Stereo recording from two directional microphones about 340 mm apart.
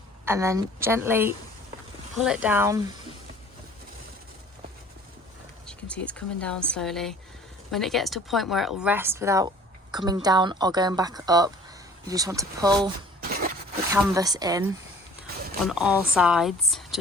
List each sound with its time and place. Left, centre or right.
0.3 s a woman's voice: centre
5.6 s a woman's voice: centre
13.2 s a sound: right
13.9 s a woman's voice: centre